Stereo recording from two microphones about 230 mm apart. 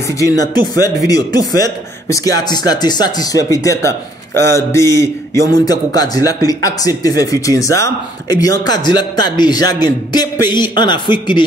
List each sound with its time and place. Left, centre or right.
0.7 s a man's voice: centre